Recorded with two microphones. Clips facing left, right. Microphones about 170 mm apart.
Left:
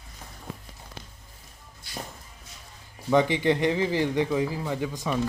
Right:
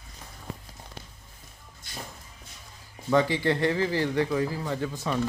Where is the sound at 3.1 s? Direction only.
20° left (ahead or behind).